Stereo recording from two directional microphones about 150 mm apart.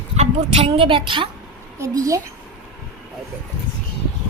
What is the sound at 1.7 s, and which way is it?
Speech, 20° right (ahead or behind).